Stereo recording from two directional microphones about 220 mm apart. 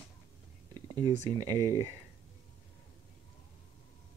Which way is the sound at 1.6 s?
15° right (ahead or behind).